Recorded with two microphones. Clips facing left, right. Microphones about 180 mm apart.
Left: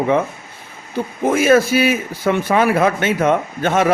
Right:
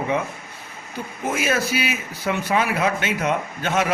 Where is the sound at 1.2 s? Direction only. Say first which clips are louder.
Left 10 dB; 50° left (ahead or behind).